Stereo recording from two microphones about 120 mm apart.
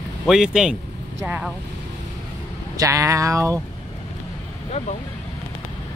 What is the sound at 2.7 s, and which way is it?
Speech, 30° right (ahead or behind).